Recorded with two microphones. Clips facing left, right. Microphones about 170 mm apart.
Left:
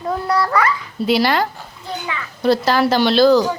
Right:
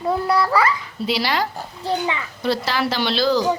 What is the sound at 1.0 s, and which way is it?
Speech, 50° left (ahead or behind).